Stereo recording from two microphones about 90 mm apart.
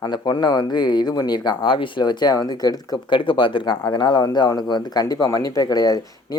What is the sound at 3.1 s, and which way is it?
Speech, 70° left (ahead or behind).